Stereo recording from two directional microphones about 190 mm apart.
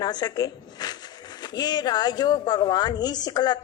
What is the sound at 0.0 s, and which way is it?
Speech, 20° left (ahead or behind).